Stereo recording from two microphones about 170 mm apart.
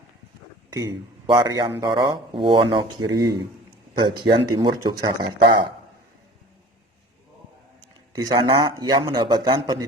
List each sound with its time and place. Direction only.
0.7 s speech: 20° right (ahead or behind)
8.1 s speech: 25° right (ahead or behind)